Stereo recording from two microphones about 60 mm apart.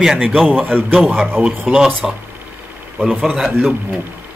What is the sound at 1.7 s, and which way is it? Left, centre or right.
Speech, centre.